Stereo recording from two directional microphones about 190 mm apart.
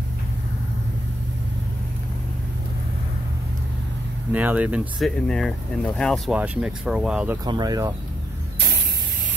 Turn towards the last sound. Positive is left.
turn(degrees=-20)  # may be behind; listen again after turning